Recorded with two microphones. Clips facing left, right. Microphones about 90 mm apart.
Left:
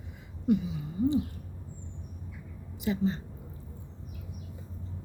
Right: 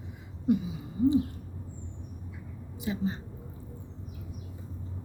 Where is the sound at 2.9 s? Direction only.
15° right (ahead or behind).